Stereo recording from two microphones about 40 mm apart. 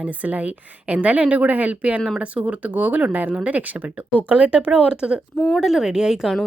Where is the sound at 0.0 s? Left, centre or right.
Right.